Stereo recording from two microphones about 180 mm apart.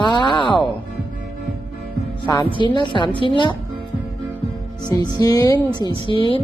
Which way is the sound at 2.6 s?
25° left (ahead or behind).